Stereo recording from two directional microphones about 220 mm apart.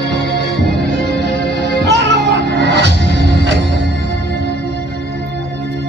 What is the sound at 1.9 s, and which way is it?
Music, 50° right (ahead or behind).